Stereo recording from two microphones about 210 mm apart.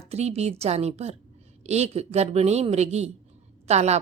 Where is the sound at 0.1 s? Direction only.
30° right (ahead or behind).